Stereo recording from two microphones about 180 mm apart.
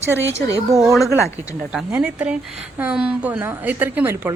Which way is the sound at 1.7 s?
5° right (ahead or behind).